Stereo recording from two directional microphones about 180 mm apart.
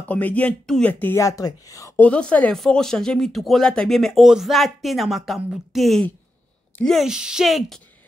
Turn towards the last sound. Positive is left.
turn(degrees=0)  # may be behind; listen again after turning